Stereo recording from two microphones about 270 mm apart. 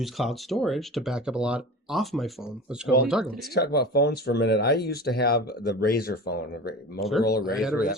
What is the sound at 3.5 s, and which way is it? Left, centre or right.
Speech, left.